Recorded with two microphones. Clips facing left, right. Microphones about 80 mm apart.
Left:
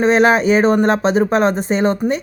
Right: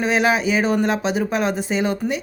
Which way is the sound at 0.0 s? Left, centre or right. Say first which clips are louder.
Left 6 dB; left.